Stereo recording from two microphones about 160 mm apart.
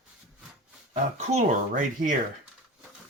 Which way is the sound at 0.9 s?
45° right (ahead or behind).